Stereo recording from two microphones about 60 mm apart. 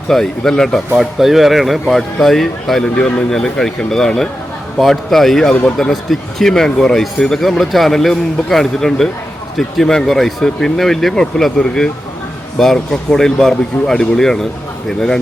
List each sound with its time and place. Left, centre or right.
0.1 s speech: centre
0.9 s a man's voice: centre
5.9 s a man's voice: centre